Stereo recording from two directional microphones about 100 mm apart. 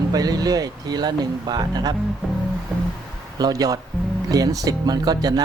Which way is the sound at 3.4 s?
35° right (ahead or behind).